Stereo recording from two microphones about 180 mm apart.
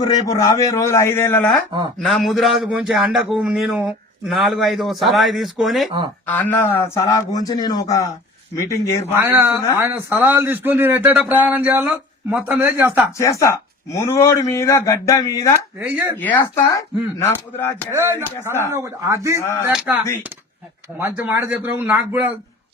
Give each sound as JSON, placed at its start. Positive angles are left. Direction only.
{"t": 0.3, "sound": "a man's voice", "side_deg": 20}
{"t": 2.0, "sound": "a man's voice", "side_deg": 0}
{"t": 6.2, "sound": "a man's voice", "side_deg": 10}
{"t": 9.1, "sound": "a man's voice", "side_deg": -15}
{"t": 13.1, "sound": "a man's voice", "side_deg": 15}
{"t": 15.8, "sound": "a man's voice", "side_deg": -10}
{"t": 16.1, "sound": "a man's voice", "side_deg": 10}
{"t": 17.9, "sound": "a man's voice", "side_deg": -15}
{"t": 18.2, "sound": "a man's voice", "side_deg": 10}
{"t": 18.7, "sound": "a man's voice", "side_deg": -15}
{"t": 19.4, "sound": "a man's voice", "side_deg": 15}
{"t": 19.6, "sound": "a man's voice", "side_deg": -5}